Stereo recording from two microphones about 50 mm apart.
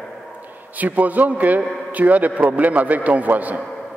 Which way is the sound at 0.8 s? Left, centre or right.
Right.